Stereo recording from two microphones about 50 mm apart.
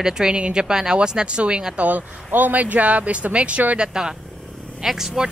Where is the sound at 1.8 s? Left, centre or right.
Right.